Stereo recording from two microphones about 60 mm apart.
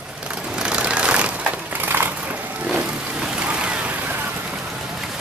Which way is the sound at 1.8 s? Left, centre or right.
Right.